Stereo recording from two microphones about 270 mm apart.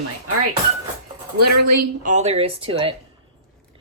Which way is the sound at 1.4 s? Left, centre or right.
Right.